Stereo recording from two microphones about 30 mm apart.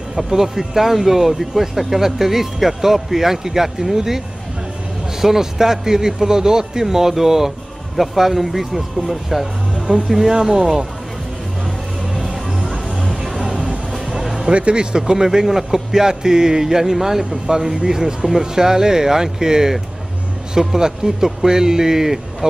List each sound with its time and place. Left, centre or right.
0.1 s speech: centre
5.2 s speech: centre
9.8 s music: right
10.0 s speech: right
12.2 s music: right
13.4 s music: right
14.4 s speech: right; by 22.5 s centre